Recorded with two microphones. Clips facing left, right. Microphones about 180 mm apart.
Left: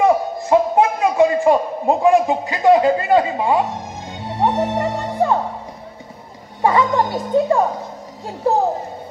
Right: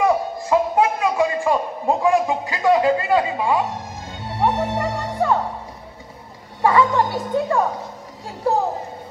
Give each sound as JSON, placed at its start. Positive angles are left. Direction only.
{"t": 0.0, "sound": "a man's voice", "side_deg": 25}
{"t": 4.4, "sound": "music", "side_deg": 20}
{"t": 6.6, "sound": "a woman's voice", "side_deg": 20}